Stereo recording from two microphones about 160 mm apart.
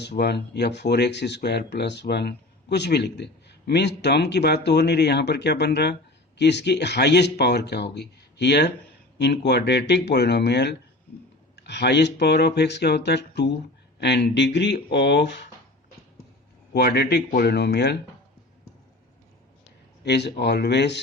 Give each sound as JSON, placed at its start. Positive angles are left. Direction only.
{"t": 0.0, "sound": "speech", "side_deg": 90}
{"t": 16.7, "sound": "speech", "side_deg": 90}
{"t": 20.1, "sound": "speech", "side_deg": 90}